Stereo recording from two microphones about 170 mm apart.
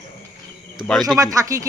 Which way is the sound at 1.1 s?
20° right (ahead or behind).